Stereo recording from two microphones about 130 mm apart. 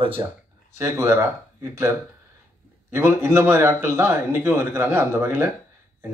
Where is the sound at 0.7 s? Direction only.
20° right (ahead or behind).